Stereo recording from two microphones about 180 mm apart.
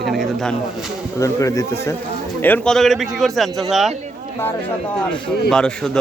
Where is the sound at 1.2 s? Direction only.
15° left (ahead or behind); by 3.9 s centre (ahead or behind).